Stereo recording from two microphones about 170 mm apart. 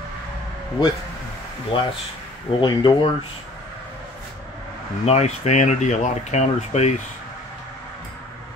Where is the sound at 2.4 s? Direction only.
25° left (ahead or behind).